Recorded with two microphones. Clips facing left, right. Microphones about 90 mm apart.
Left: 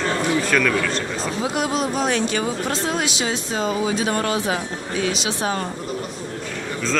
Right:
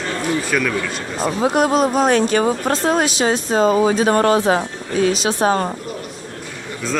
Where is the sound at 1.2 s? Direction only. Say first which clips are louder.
Right 9 dB; 50° right (ahead or behind).